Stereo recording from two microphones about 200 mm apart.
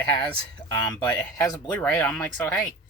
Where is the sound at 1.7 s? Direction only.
5° left (ahead or behind).